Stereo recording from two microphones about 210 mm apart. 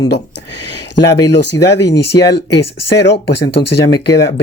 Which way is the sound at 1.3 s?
55° left (ahead or behind).